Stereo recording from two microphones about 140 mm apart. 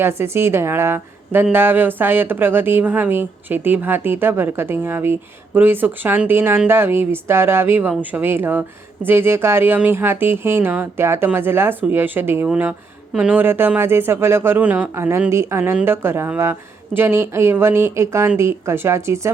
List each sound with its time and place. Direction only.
0.0 s speech: 20° right (ahead or behind)